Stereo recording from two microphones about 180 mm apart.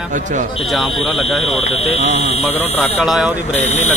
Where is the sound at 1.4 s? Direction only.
35° left (ahead or behind).